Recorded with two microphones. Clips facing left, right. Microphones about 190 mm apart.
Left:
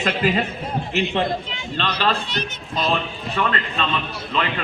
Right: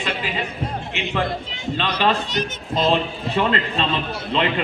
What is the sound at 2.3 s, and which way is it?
Speech, 45° right (ahead or behind).